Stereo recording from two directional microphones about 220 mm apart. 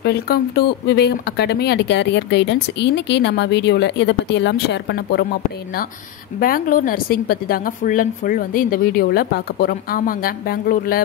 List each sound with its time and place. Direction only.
0.0 s a woman's voice: 50° left (ahead or behind)